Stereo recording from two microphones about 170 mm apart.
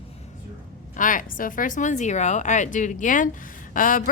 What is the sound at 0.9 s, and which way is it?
Speech, 50° left (ahead or behind).